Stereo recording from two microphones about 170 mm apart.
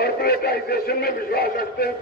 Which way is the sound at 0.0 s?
65° left (ahead or behind).